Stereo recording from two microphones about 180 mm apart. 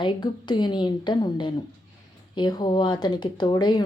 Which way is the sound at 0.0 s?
25° left (ahead or behind).